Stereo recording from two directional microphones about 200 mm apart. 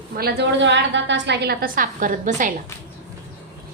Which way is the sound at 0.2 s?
55° right (ahead or behind).